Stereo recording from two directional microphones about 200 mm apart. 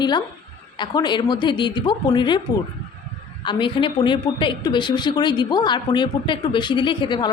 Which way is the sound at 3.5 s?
25° left (ahead or behind).